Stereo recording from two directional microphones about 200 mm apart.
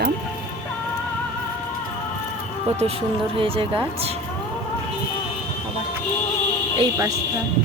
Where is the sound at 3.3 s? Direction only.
25° right (ahead or behind).